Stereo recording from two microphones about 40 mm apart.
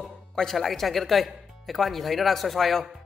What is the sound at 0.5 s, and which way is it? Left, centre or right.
Speech, centre.